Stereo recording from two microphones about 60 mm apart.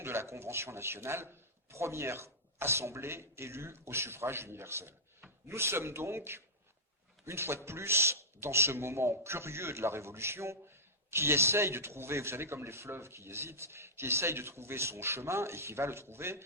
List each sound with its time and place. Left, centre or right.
0.0 s a man's voice: right